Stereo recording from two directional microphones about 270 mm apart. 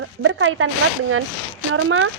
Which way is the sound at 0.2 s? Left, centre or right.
Right.